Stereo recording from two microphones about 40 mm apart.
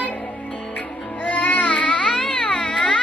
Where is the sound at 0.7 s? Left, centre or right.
Left.